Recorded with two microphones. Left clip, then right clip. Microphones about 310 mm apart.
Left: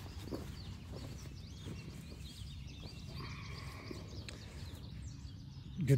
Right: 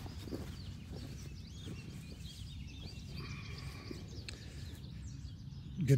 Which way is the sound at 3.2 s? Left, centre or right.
Centre.